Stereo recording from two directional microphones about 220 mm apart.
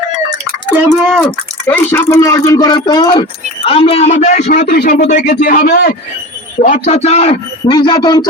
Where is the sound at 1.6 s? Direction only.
10° left (ahead or behind); by 4.5 s 35° left (ahead or behind).